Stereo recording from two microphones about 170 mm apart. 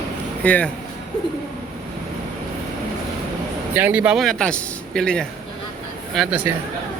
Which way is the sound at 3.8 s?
10° right (ahead or behind).